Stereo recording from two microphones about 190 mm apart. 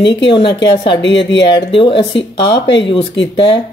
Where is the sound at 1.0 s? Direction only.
65° left (ahead or behind).